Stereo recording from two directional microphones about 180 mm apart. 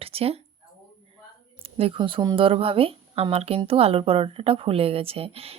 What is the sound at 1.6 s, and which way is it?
A woman's voice, 30° right (ahead or behind).